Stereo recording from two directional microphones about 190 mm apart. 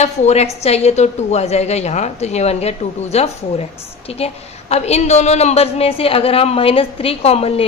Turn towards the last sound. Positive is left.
turn(degrees=30)  # may be behind; listen again after turning